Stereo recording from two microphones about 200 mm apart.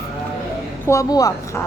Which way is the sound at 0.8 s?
15° left (ahead or behind).